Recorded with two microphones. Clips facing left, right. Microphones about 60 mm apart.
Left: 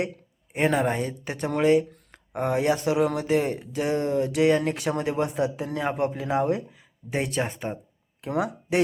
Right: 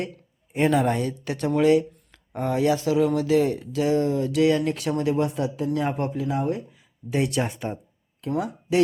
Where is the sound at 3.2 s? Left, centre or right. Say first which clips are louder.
Right 3 dB; left.